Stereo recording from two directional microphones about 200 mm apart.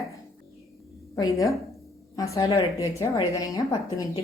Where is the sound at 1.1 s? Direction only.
15° left (ahead or behind).